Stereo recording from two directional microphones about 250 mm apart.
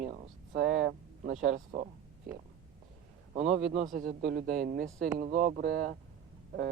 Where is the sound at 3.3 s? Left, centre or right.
Right.